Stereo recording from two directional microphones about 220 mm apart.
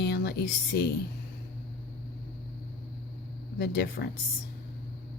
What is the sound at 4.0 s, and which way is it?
Speech, 45° left (ahead or behind).